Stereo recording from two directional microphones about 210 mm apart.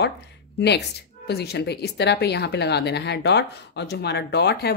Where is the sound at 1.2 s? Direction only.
50° left (ahead or behind).